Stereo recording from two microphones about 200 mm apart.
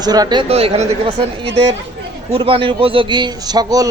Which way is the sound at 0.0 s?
20° right (ahead or behind).